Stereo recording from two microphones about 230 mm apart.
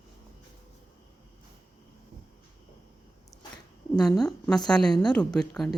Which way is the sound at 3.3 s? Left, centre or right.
Centre.